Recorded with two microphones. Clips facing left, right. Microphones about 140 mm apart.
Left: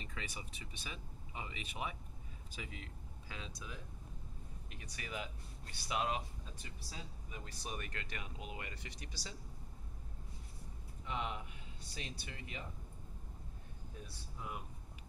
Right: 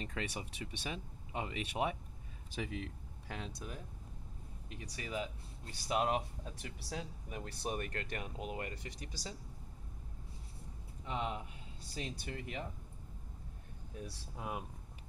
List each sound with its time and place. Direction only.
0.0 s speech: 70° right (ahead or behind)
4.6 s speech: 30° right (ahead or behind)
5.9 s speech: 50° right (ahead or behind)
11.1 s speech: 35° right (ahead or behind)
11.9 s speech: 45° right (ahead or behind)
14.0 s speech: 70° right (ahead or behind)